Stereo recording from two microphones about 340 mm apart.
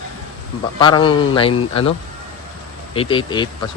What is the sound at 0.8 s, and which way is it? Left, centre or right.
Speech, centre.